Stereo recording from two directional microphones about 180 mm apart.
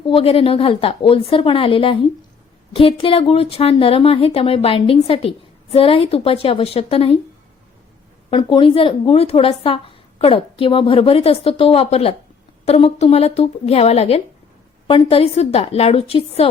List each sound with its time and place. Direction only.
0.0 s speech: 30° left (ahead or behind)
8.3 s speech: 25° left (ahead or behind)